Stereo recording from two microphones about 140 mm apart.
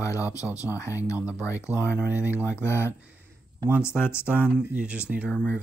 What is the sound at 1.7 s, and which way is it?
Speech, 10° right (ahead or behind).